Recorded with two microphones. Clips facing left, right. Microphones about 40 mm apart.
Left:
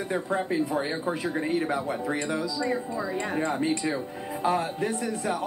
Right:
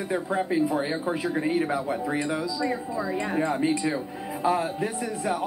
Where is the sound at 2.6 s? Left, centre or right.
Centre.